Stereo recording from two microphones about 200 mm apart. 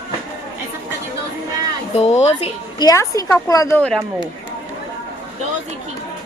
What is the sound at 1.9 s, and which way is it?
Speech, 35° left (ahead or behind).